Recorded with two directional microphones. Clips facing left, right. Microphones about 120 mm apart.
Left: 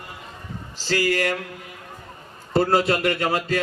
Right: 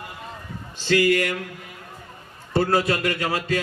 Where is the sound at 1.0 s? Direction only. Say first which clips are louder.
Right 1 dB; 30° left (ahead or behind).